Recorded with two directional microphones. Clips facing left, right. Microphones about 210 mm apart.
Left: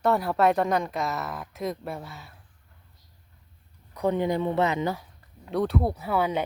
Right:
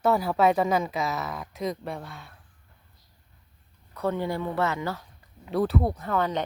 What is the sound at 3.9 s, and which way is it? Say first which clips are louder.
Speech: left 3 dB; 15° left (ahead or behind).